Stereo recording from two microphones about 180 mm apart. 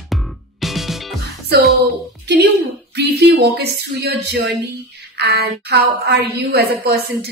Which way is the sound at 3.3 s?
65° right (ahead or behind).